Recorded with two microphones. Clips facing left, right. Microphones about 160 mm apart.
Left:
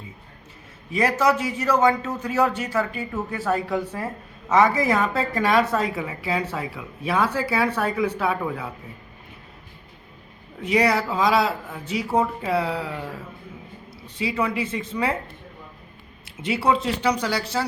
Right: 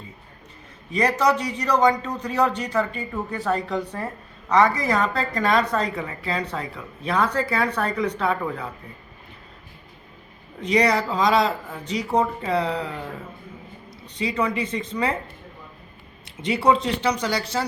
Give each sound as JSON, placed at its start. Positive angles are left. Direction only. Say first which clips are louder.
{"t": 0.9, "sound": "a man's voice", "louder": "even", "side_deg": 5}
{"t": 10.6, "sound": "a woman's voice", "louder": "even", "side_deg": 5}
{"t": 14.2, "sound": "a woman's voice", "louder": "even", "side_deg": 5}
{"t": 16.2, "sound": "a man's voice", "louder": "right 2 dB", "side_deg": 5}